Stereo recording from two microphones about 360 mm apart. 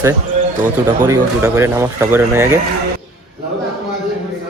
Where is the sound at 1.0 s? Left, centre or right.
Centre.